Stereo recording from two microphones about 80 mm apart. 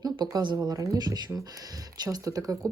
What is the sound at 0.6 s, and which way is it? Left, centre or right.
Speech, right.